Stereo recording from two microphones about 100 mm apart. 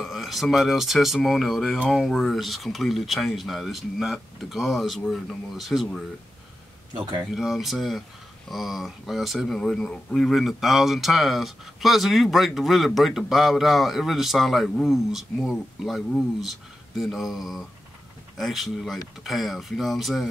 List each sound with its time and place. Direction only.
0.0 s speech: centre (ahead or behind)
6.9 s speech: 50° right (ahead or behind)
7.2 s speech: centre (ahead or behind)